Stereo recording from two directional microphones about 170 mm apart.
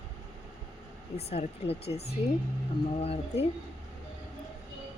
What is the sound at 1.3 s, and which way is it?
Speech, 35° left (ahead or behind).